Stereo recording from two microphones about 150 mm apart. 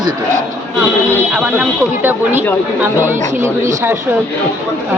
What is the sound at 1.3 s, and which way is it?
Speech, 5° right (ahead or behind).